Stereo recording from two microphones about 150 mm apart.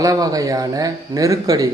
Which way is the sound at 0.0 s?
25° right (ahead or behind).